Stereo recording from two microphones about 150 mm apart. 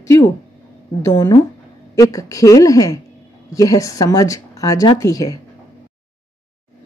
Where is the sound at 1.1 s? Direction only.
30° left (ahead or behind).